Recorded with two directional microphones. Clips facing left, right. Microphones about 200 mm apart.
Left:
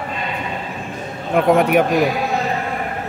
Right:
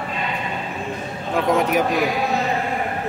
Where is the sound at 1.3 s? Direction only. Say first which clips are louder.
Left 5 dB; 60° left (ahead or behind).